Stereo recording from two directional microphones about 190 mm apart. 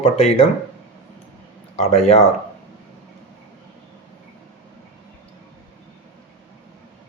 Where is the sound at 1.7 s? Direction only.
35° left (ahead or behind).